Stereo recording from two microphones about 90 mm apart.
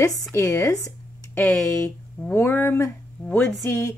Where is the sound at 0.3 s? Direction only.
30° left (ahead or behind).